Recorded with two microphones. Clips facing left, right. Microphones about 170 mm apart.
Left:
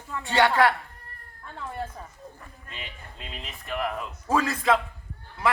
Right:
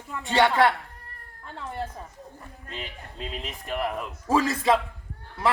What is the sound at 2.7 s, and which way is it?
Speech, 35° right (ahead or behind).